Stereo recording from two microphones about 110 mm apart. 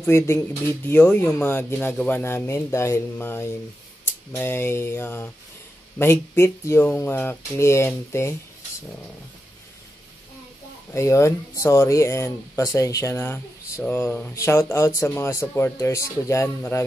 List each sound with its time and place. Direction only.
0.0 s speech: 25° left (ahead or behind)
10.9 s speech: 25° left (ahead or behind)